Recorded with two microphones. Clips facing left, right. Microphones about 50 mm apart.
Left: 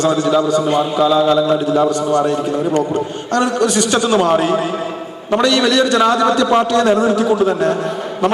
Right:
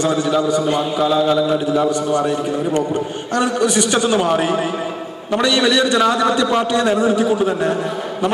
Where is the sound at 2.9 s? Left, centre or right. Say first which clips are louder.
Left 2 dB; centre.